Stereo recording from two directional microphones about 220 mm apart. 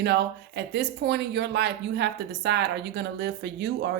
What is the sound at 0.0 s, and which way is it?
Speech, 50° right (ahead or behind).